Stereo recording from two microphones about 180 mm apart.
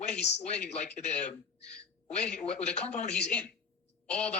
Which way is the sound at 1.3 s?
35° left (ahead or behind).